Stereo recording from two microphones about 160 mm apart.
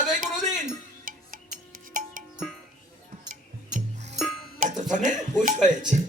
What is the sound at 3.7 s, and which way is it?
Music, 55° right (ahead or behind).